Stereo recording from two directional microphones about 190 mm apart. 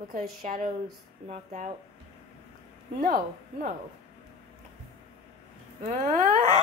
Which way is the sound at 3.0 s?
45° right (ahead or behind).